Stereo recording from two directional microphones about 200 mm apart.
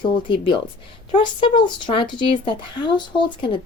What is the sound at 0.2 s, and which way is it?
Speech, 25° left (ahead or behind).